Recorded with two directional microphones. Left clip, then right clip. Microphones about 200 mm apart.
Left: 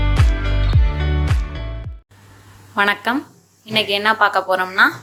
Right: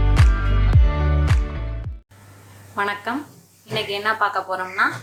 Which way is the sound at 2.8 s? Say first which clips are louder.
Left 6 dB; 40° left (ahead or behind).